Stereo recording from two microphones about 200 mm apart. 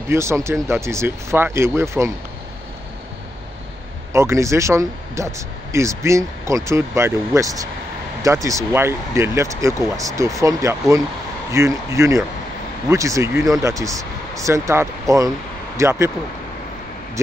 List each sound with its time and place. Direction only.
0.1 s speech: 15° right (ahead or behind)
4.1 s speech: 15° right (ahead or behind)